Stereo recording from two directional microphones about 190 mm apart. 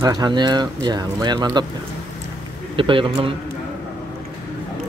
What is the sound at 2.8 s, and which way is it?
Speech, 25° right (ahead or behind).